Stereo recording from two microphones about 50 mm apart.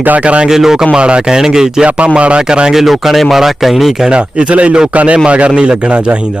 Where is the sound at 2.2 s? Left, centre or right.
Right.